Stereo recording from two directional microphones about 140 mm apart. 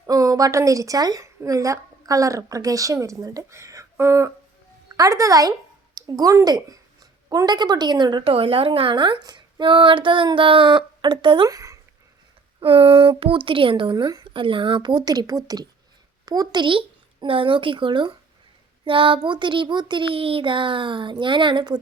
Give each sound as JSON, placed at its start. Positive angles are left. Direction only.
{"t": 0.1, "sound": "a woman's voice", "side_deg": -25}
{"t": 11.4, "sound": "speech", "side_deg": -25}
{"t": 12.5, "sound": "a child's voice", "side_deg": -40}
{"t": 13.9, "sound": "a child's voice", "side_deg": -30}